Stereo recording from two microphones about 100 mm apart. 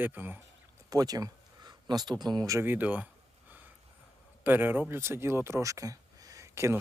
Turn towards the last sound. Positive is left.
turn(degrees=-25)  # may be behind; listen again after turning